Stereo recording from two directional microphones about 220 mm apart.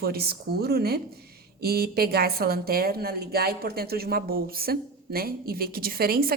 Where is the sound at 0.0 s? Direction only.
45° right (ahead or behind).